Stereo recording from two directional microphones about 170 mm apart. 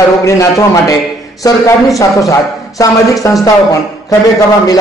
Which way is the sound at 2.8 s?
20° left (ahead or behind).